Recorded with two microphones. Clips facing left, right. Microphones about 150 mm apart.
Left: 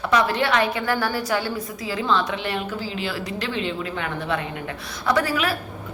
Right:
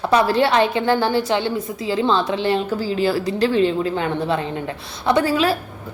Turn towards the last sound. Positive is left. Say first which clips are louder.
# right 5 dB
turn(degrees=-30)  # may be behind; listen again after turning